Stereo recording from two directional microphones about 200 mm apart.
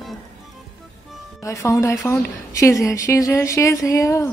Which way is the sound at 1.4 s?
15° left (ahead or behind).